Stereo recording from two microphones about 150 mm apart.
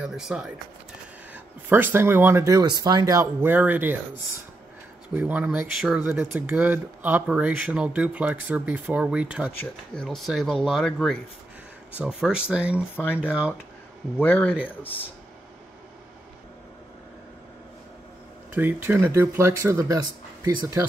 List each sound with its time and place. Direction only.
0.0 s speech: 5° right (ahead or behind)
1.3 s speech: 15° right (ahead or behind)
3.3 s speech: 10° right (ahead or behind)
5.1 s speech: 10° right (ahead or behind)
9.6 s speech: 5° left (ahead or behind)
12.9 s speech: 15° left (ahead or behind)
13.2 s speech: 5° right (ahead or behind)
14.1 s speech: 10° left (ahead or behind)
18.5 s speech: 15° right (ahead or behind)